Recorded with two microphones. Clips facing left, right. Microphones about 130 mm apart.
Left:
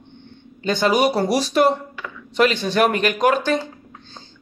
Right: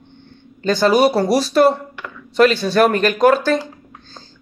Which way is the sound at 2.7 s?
40° right (ahead or behind).